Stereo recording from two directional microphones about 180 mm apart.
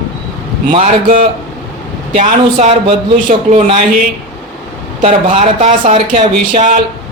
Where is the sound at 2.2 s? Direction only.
40° right (ahead or behind).